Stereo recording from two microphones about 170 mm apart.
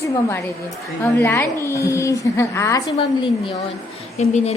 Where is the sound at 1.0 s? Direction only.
15° left (ahead or behind).